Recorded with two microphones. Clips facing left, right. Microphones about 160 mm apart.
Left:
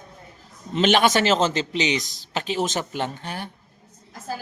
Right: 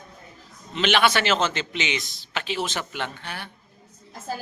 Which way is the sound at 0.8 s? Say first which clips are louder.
Left 3 dB; 45° left (ahead or behind).